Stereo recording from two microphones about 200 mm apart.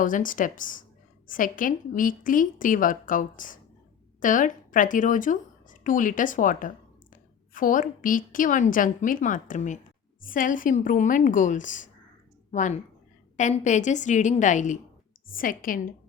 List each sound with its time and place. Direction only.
0.0 s a woman's voice: 40° left (ahead or behind)